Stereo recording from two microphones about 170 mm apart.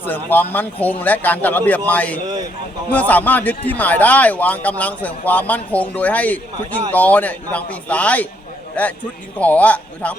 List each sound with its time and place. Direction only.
0.0 s speech: 10° left (ahead or behind)